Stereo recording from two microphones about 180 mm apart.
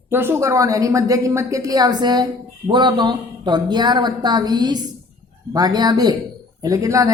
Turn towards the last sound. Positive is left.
turn(degrees=-20)  # may be behind; listen again after turning